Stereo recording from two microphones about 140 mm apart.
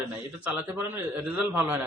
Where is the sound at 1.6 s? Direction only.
10° right (ahead or behind).